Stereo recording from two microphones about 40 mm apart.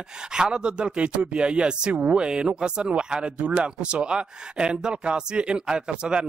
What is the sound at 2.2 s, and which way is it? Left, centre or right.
Speech, right.